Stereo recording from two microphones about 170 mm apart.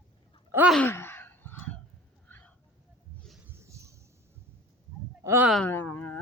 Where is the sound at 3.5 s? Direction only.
15° right (ahead or behind).